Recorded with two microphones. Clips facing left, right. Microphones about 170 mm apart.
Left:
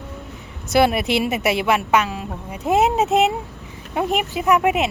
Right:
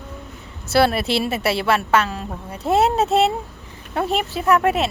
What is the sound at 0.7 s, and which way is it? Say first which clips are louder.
A woman's voice: left 1 dB; 15° left (ahead or behind).